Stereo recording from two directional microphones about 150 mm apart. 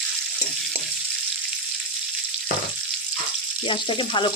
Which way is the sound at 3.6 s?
35° left (ahead or behind).